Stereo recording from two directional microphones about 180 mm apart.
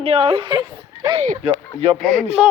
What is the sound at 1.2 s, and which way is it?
Speech, 40° right (ahead or behind).